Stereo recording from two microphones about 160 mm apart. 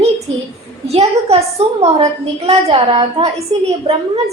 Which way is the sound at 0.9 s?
40° right (ahead or behind).